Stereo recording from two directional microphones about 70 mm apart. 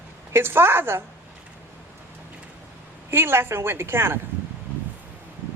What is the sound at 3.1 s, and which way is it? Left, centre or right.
Speech, right.